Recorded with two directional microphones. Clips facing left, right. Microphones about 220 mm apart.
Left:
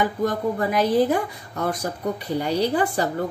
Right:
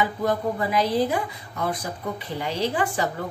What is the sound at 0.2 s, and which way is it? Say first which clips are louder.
A woman's voice: left 2 dB; 45° left (ahead or behind).